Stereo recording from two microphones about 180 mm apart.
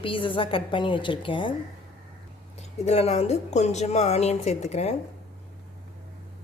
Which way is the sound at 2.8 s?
35° left (ahead or behind).